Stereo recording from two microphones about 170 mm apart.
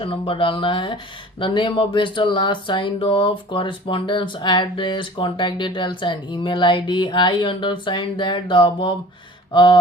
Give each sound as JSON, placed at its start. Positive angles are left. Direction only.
{"t": 0.0, "sound": "speech", "side_deg": 30}